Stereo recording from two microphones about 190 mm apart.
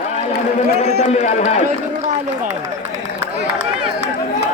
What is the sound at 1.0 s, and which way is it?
Speech, 35° left (ahead or behind).